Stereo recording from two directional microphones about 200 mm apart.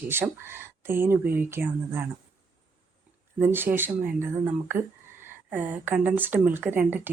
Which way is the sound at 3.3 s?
10° right (ahead or behind).